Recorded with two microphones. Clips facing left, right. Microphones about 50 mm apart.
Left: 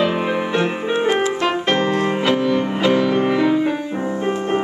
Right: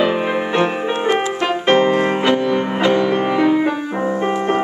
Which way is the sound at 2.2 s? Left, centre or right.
Centre.